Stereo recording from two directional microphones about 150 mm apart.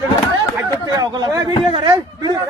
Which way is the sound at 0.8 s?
25° right (ahead or behind).